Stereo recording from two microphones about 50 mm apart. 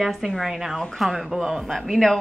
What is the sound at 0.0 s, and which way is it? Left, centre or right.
A woman's voice, centre.